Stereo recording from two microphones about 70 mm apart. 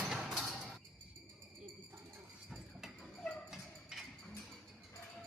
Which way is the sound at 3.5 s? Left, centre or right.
Centre.